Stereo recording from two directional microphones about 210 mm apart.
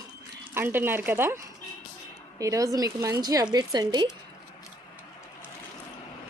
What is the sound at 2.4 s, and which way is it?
A woman's voice, 15° right (ahead or behind).